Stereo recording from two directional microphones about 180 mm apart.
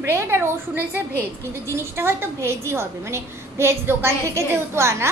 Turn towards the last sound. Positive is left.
turn(degrees=-15)  # may be behind; listen again after turning